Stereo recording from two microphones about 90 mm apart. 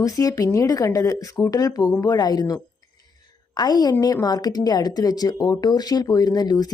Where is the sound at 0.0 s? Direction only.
40° left (ahead or behind).